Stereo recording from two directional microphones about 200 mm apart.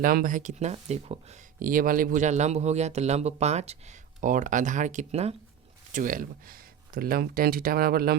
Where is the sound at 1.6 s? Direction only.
45° right (ahead or behind).